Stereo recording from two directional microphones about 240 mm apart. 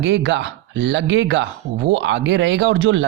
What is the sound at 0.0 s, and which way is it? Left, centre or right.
Speech, right.